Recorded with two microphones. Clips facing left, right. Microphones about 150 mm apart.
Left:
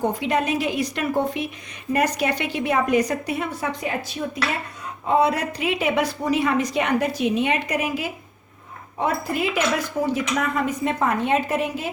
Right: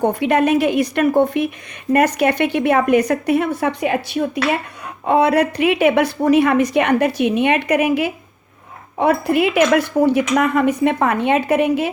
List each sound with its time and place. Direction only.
0.0 s a woman's voice: 60° right (ahead or behind)